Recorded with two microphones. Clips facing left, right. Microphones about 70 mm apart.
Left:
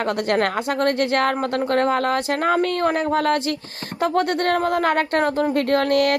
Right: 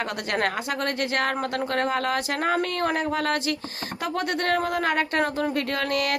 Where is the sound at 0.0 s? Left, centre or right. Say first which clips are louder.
Left 6 dB; left.